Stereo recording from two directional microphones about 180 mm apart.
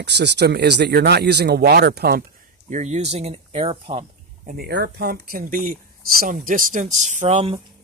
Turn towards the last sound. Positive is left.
turn(degrees=-35)  # may be behind; listen again after turning